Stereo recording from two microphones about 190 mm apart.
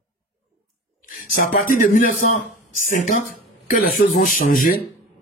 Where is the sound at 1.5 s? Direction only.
45° left (ahead or behind).